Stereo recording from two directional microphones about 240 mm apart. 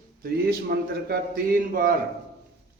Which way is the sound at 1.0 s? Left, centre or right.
Right.